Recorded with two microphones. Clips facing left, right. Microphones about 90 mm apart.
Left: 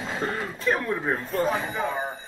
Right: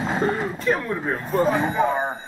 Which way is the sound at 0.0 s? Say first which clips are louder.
Right 6 dB; 35° right (ahead or behind).